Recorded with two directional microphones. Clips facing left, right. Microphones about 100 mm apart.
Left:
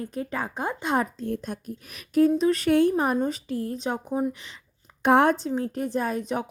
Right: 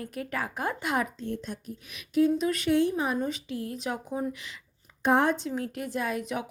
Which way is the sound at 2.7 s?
50° left (ahead or behind).